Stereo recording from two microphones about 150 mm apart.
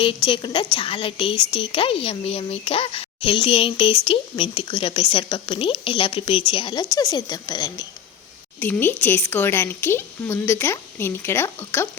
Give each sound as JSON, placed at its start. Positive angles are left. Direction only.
{"t": 0.0, "sound": "a woman's voice", "side_deg": 35}
{"t": 8.5, "sound": "speech", "side_deg": 15}